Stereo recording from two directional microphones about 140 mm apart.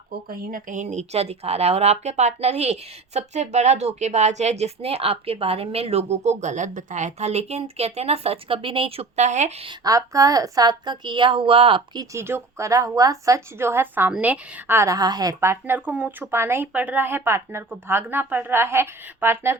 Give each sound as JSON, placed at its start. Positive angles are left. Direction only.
{"t": 0.3, "sound": "a woman's voice", "side_deg": -70}
{"t": 9.6, "sound": "a woman's voice", "side_deg": -25}
{"t": 12.1, "sound": "a woman's voice", "side_deg": -20}